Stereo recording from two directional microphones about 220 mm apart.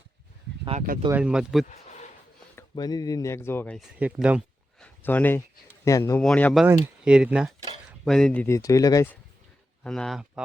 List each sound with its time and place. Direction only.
1.1 s speech: 5° right (ahead or behind)
1.6 s a sound: 35° left (ahead or behind)
2.6 s speech: 20° left (ahead or behind); by 4.9 s 5° right (ahead or behind)
5.0 s speech: 10° left (ahead or behind)
9.8 s speech: 5° left (ahead or behind)